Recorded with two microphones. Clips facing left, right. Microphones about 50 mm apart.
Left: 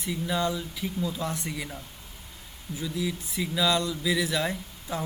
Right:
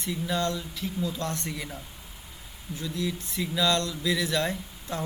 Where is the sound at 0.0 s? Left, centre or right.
Centre.